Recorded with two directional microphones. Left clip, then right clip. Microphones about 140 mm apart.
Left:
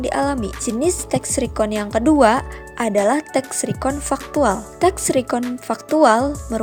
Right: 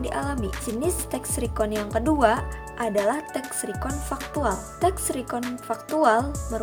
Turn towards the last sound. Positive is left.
turn(degrees=60)  # may be behind; listen again after turning